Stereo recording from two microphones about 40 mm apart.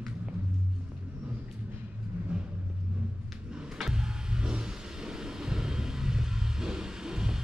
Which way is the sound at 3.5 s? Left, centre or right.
Centre.